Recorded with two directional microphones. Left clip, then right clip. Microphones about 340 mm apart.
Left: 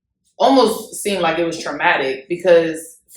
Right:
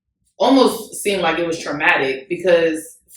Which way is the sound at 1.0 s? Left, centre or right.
Centre.